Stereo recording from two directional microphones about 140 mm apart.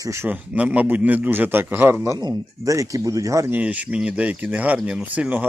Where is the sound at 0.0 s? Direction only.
20° right (ahead or behind).